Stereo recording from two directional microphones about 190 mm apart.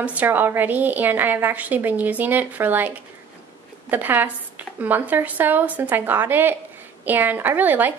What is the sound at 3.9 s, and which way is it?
A woman's voice, 10° right (ahead or behind).